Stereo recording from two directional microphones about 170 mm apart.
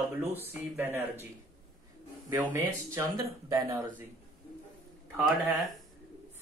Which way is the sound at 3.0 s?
20° right (ahead or behind).